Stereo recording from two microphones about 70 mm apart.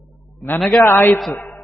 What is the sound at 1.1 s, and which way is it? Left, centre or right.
Speech, centre.